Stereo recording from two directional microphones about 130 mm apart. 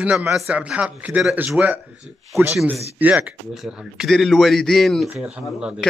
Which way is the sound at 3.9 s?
Centre (ahead or behind).